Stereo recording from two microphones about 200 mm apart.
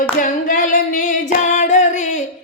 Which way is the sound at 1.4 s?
35° left (ahead or behind).